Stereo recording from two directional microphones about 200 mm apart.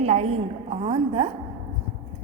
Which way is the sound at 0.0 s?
30° right (ahead or behind).